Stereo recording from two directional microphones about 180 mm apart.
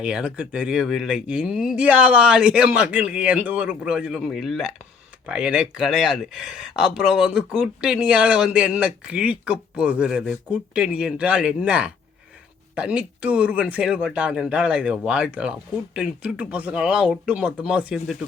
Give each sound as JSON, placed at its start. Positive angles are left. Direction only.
{"t": 0.0, "sound": "speech", "side_deg": -5}